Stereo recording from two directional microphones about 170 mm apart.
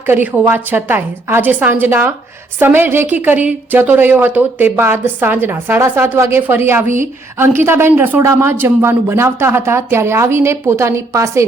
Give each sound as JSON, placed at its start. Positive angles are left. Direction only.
{"t": 0.0, "sound": "a woman's voice", "side_deg": -10}
{"t": 6.8, "sound": "a woman's voice", "side_deg": -50}
{"t": 7.3, "sound": "a woman's voice", "side_deg": -15}